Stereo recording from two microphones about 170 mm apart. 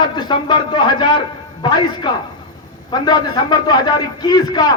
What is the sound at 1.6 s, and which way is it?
A man's voice, 25° left (ahead or behind).